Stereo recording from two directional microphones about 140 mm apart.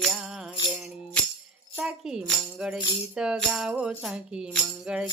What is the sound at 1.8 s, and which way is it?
Music, 5° right (ahead or behind).